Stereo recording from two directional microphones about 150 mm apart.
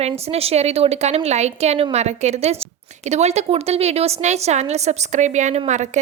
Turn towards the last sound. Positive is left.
turn(degrees=-50)  # may be behind; listen again after turning